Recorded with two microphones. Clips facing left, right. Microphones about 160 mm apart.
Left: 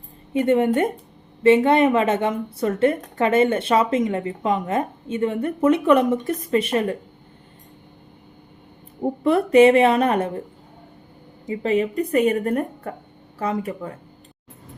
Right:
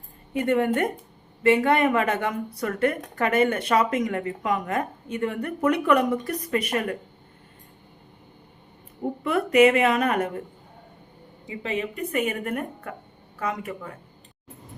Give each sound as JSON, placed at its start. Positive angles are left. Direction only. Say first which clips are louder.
{"t": 0.3, "sound": "a woman's voice", "louder": "left 4 dB", "side_deg": 20}
{"t": 9.2, "sound": "speech", "louder": "left 5 dB", "side_deg": 30}
{"t": 11.4, "sound": "speech", "louder": "left 8 dB", "side_deg": 40}